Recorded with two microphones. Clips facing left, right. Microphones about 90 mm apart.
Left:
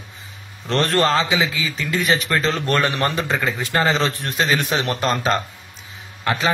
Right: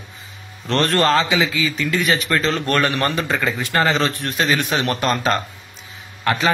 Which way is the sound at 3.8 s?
20° left (ahead or behind).